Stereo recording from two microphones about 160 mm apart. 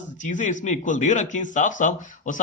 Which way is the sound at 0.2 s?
50° left (ahead or behind).